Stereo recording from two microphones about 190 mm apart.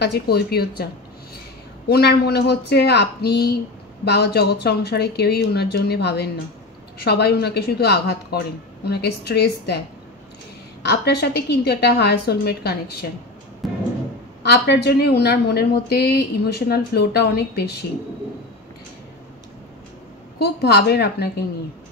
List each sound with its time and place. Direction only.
0.0 s a woman's voice: 60° left (ahead or behind)
1.9 s a woman's voice: 60° left (ahead or behind)
13.6 s music: centre (ahead or behind)
14.4 s a woman's voice: 60° left (ahead or behind)
20.3 s a woman's voice: 60° left (ahead or behind)